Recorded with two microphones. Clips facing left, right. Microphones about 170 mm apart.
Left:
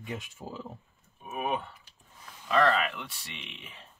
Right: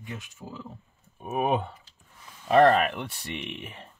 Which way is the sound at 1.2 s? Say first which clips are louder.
Right 6 dB; 55° right (ahead or behind).